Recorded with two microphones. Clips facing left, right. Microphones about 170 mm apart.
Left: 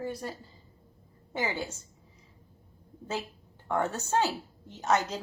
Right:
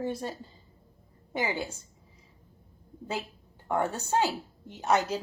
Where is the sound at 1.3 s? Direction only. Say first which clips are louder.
Right 1 dB; 15° right (ahead or behind).